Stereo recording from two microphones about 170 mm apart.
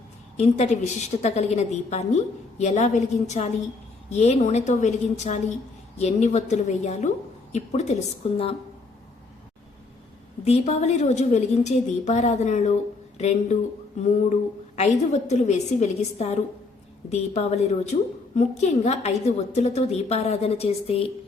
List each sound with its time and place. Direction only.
0.3 s a woman's voice: 40° left (ahead or behind)
10.4 s a woman's voice: 40° left (ahead or behind)
14.8 s a woman's voice: 40° left (ahead or behind)